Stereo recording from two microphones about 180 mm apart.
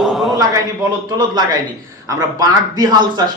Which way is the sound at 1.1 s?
25° right (ahead or behind).